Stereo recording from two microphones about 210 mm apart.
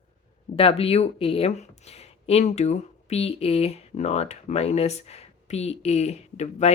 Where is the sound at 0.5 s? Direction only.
25° left (ahead or behind).